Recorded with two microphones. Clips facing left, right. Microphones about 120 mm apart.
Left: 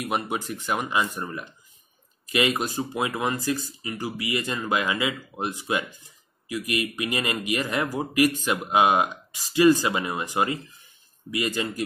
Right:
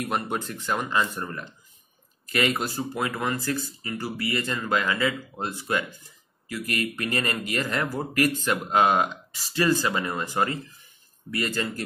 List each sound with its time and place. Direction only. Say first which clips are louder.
0.0 s speech: even; 10° left (ahead or behind)